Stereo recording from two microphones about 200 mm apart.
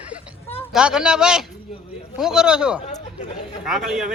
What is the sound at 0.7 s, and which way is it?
Speech, 5° right (ahead or behind).